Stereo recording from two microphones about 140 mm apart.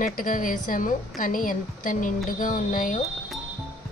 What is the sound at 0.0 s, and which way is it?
A woman's voice, 75° left (ahead or behind).